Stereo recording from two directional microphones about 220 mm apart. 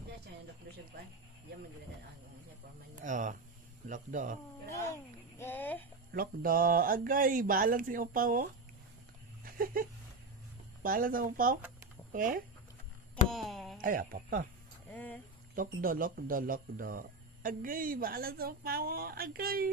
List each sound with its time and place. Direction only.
3.0 s speech: 35° right (ahead or behind)
4.6 s a child's voice: 15° left (ahead or behind)
6.1 s speech: 40° right (ahead or behind)
9.4 s a sound: 40° right (ahead or behind)
10.8 s speech: 40° right (ahead or behind)
13.3 s speech: centre (ahead or behind)
13.7 s speech: 40° right (ahead or behind)
15.5 s speech: 40° right (ahead or behind)